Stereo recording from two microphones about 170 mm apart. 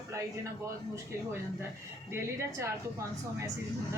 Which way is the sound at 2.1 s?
15° right (ahead or behind).